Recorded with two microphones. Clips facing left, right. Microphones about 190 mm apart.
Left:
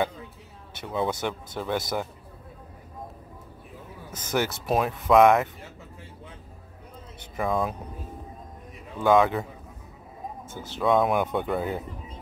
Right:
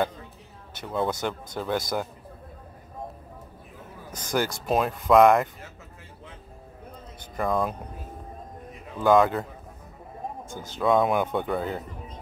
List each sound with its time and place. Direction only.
0.8 s speech: centre (ahead or behind)
4.1 s speech: 5° left (ahead or behind)
7.3 s speech: centre (ahead or behind)
8.9 s speech: centre (ahead or behind)
10.8 s speech: centre (ahead or behind)